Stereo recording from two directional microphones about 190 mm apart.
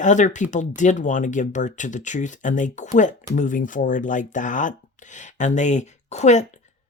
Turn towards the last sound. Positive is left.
turn(degrees=35)  # may be behind; listen again after turning